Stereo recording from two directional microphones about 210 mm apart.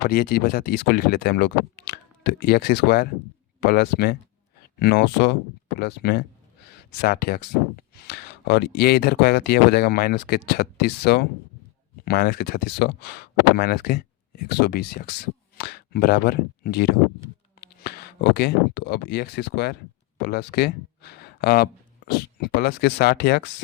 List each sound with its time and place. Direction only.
0.1 s speech: 45° left (ahead or behind)